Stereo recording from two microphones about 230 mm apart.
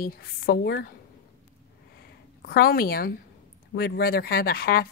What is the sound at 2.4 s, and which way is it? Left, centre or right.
A woman's voice, left.